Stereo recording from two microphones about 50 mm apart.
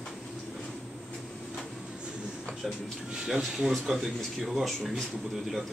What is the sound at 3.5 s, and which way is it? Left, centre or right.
Speech, centre.